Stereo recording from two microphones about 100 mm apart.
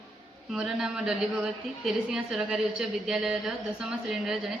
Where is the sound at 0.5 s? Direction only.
5° right (ahead or behind).